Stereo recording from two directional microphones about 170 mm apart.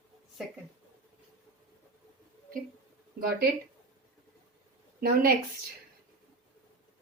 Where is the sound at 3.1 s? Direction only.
60° right (ahead or behind).